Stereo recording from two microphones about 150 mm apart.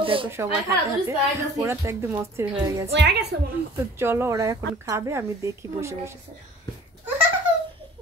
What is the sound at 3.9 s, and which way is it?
Speech, 15° right (ahead or behind).